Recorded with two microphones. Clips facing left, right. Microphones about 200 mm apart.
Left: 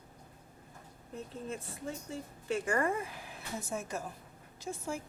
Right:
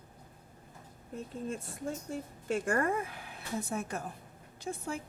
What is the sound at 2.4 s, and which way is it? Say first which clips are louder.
A woman's voice: right 1 dB; 50° right (ahead or behind).